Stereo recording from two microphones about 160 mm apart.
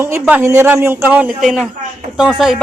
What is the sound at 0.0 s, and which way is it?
A woman's voice, 10° right (ahead or behind).